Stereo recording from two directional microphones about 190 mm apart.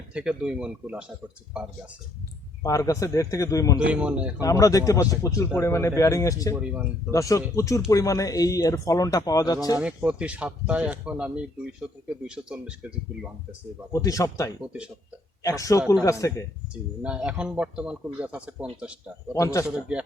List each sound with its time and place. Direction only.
0.1 s a man's voice: 5° right (ahead or behind)
2.6 s a man's voice: 15° left (ahead or behind)
3.8 s speech: 5° right (ahead or behind)
4.4 s a man's voice: 15° left (ahead or behind)
6.5 s speech: 10° right (ahead or behind)
7.1 s a man's voice: 15° left (ahead or behind)
9.7 s speech: 5° right (ahead or behind)
12.3 s a man's voice: 5° right (ahead or behind)
13.9 s a man's voice: 15° left (ahead or behind)
17.0 s a man's voice: 5° right (ahead or behind)
19.3 s a man's voice: 15° left (ahead or behind)
19.9 s a man's voice: 5° right (ahead or behind)